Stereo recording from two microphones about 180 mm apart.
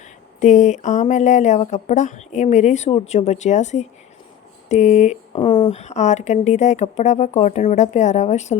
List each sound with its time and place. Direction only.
0.3 s speech: 40° left (ahead or behind)